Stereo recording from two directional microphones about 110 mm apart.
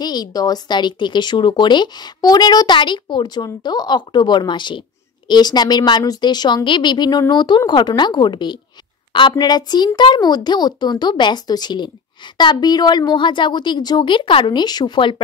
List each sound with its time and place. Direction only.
0.0 s a woman's voice: 40° left (ahead or behind)